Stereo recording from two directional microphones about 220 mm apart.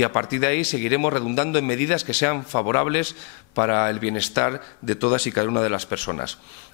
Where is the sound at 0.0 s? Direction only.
15° left (ahead or behind).